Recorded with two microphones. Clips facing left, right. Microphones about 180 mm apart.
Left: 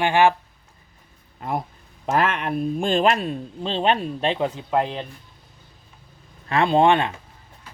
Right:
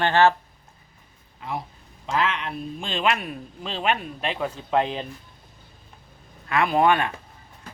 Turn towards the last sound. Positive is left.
turn(degrees=25)  # may be behind; listen again after turning